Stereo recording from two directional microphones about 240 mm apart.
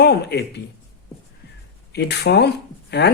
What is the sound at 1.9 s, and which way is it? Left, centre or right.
Speech, left.